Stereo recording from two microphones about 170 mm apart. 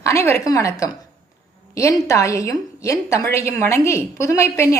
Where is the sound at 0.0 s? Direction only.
15° left (ahead or behind).